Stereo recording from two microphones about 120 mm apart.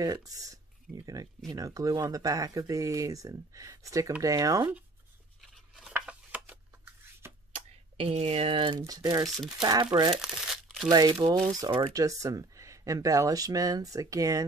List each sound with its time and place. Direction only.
0.0 s speech: 30° right (ahead or behind)
5.9 s a sound: 15° right (ahead or behind)
7.5 s speech: 60° right (ahead or behind); by 8.8 s 45° right (ahead or behind)
8.8 s speech: 30° right (ahead or behind)
10.1 s crumpling: 5° right (ahead or behind)
10.9 s speech: 35° right (ahead or behind)
11.9 s speech: 30° right (ahead or behind)